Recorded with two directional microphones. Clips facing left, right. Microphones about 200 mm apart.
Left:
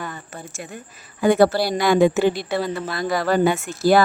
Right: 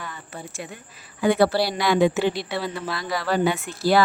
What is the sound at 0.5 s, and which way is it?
Speech, 45° left (ahead or behind).